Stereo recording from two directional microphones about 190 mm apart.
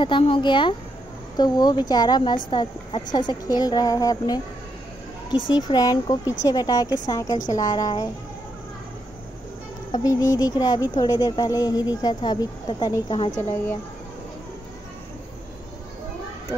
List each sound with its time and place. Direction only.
0.0 s speech: 25° left (ahead or behind)
9.9 s speech: 20° left (ahead or behind)